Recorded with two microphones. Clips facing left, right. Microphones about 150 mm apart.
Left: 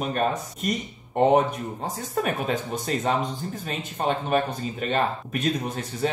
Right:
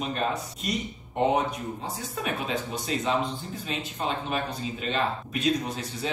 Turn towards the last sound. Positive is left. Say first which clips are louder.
# left 5 dB
turn(degrees=50)  # may be behind; listen again after turning